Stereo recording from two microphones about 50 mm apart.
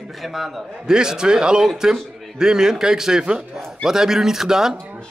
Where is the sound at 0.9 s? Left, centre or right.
Centre.